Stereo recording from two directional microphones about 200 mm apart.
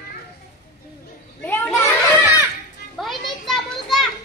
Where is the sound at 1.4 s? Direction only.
10° left (ahead or behind).